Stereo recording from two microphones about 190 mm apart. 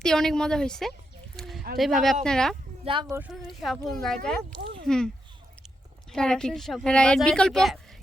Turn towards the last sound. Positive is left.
turn(degrees=0)  # may be behind; listen again after turning